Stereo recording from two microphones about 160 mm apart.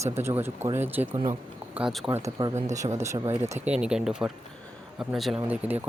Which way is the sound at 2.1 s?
20° right (ahead or behind).